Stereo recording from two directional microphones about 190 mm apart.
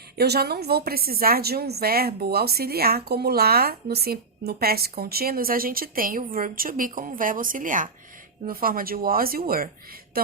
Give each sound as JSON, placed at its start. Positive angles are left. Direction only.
{"t": 0.2, "sound": "a woman's voice", "side_deg": -55}